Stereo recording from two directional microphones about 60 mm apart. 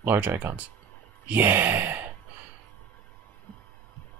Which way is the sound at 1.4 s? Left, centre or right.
Right.